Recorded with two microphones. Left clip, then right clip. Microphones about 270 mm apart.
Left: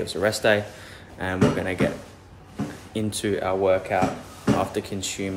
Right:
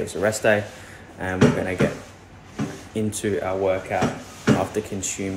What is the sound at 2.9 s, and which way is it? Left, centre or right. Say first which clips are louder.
Speech: right 1 dB; centre.